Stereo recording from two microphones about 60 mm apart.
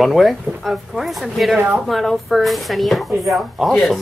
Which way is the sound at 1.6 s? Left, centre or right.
Right.